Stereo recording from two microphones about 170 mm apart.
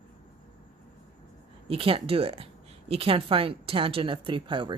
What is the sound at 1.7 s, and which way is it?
A woman's voice, 35° right (ahead or behind).